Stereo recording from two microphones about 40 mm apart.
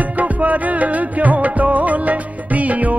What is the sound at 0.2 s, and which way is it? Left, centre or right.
Music, right.